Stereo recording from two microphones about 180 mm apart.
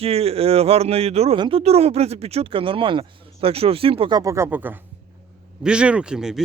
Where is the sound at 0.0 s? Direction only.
35° right (ahead or behind).